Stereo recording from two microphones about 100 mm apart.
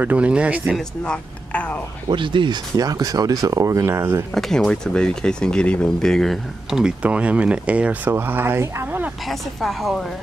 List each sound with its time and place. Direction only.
0.0 s speech: 15° right (ahead or behind)
0.7 s speech: 5° left (ahead or behind)
2.0 s speech: 55° right (ahead or behind); by 4.2 s 25° right (ahead or behind)
4.3 s speech: 5° left (ahead or behind); by 9.0 s 25° right (ahead or behind)
9.3 s a woman's voice: centre (ahead or behind)